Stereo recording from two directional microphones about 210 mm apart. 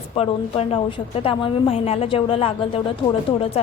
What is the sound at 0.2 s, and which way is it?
A woman's voice, 30° left (ahead or behind).